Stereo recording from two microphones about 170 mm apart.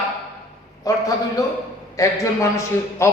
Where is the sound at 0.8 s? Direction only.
20° left (ahead or behind).